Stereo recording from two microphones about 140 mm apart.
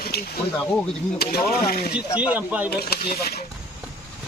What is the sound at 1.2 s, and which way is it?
Speech, 90° left.